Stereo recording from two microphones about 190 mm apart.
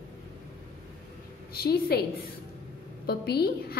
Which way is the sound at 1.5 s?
55° left (ahead or behind).